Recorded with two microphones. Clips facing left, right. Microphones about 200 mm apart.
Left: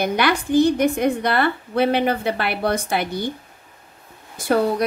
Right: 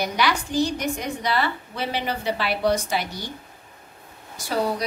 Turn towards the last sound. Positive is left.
turn(degrees=55)  # may be behind; listen again after turning